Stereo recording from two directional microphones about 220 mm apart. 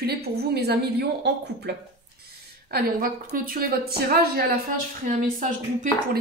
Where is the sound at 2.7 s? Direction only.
40° right (ahead or behind).